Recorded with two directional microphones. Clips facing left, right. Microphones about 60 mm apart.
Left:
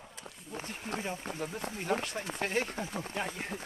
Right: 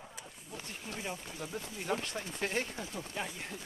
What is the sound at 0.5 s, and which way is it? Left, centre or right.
Speech, left.